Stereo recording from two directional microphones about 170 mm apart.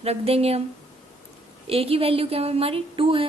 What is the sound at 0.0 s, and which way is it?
Speech, 35° right (ahead or behind).